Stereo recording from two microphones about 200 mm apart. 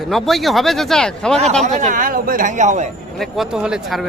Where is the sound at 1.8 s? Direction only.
40° right (ahead or behind).